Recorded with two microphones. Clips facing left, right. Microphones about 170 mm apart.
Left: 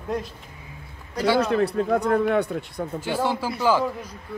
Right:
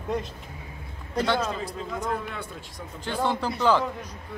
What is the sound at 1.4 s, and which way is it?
A man's voice, 65° left (ahead or behind).